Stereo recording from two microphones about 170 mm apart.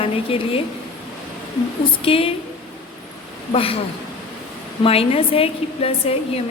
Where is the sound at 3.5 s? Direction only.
35° left (ahead or behind).